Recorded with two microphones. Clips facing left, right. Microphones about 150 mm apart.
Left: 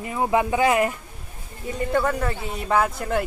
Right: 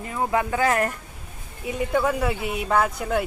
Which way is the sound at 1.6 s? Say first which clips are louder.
Even; 5° right (ahead or behind).